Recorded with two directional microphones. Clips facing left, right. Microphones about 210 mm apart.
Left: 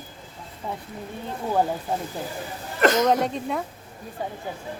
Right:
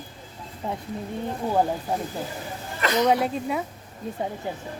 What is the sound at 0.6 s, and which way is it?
Speech, 25° right (ahead or behind).